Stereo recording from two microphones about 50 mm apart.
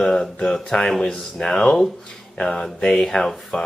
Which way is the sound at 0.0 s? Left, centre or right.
Centre.